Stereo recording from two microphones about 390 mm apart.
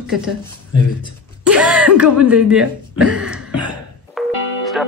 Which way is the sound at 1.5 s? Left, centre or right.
Centre.